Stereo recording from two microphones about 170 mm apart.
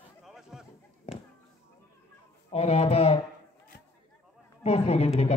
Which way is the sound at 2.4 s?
35° left (ahead or behind).